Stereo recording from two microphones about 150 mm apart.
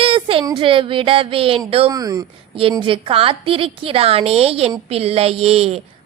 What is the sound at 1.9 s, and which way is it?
Speech, 25° right (ahead or behind).